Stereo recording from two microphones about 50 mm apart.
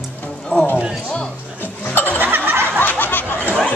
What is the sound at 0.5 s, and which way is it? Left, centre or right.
Speech, left.